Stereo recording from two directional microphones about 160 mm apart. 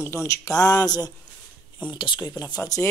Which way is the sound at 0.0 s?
15° left (ahead or behind).